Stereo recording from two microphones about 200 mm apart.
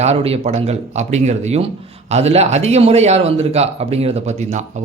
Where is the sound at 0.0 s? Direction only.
30° right (ahead or behind).